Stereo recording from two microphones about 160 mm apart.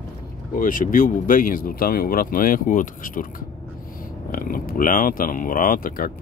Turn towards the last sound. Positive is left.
turn(degrees=60)  # may be behind; listen again after turning